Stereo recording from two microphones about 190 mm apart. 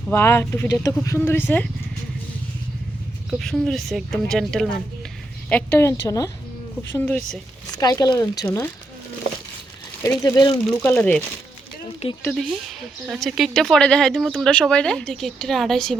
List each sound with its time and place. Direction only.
0.1 s speech: 15° left (ahead or behind)
3.2 s speech: centre (ahead or behind); by 6.3 s 20° left (ahead or behind)
6.9 s speech: 5° left (ahead or behind)
7.8 s speech: 20° left (ahead or behind)
10.0 s speech: 15° left (ahead or behind)
10.8 s speech: 10° left (ahead or behind)
12.0 s speech: 35° left (ahead or behind)
13.1 s speech: centre (ahead or behind)